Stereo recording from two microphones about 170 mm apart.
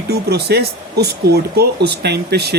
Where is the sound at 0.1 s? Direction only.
70° right (ahead or behind).